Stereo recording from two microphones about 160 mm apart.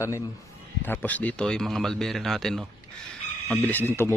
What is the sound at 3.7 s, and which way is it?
Speech, 10° left (ahead or behind).